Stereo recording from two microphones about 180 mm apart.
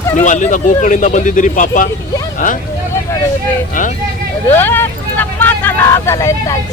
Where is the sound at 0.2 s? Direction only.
45° left (ahead or behind).